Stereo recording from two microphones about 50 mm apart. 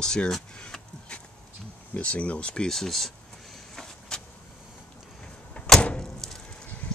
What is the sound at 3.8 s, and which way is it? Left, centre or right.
Vehicle, centre.